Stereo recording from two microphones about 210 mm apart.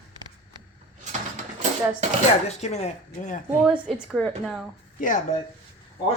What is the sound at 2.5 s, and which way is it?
Speech, 30° left (ahead or behind).